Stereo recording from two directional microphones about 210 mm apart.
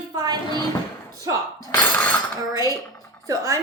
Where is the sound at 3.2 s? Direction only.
15° right (ahead or behind).